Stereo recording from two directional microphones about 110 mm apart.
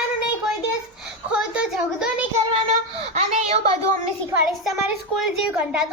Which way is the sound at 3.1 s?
85° right.